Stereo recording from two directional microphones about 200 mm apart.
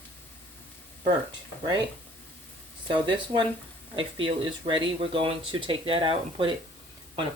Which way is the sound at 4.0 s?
25° right (ahead or behind).